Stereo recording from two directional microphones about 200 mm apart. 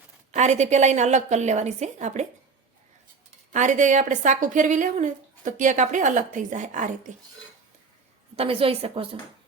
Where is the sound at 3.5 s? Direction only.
35° right (ahead or behind).